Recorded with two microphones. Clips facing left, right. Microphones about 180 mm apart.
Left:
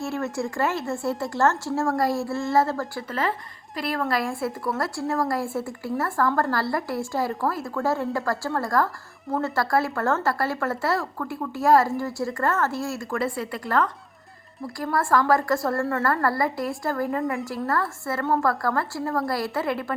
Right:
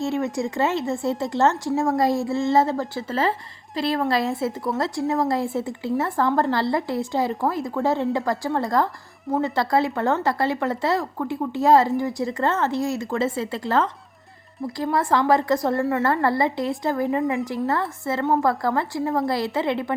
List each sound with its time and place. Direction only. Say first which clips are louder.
0.0 s a woman's voice: right 4 dB; 20° right (ahead or behind)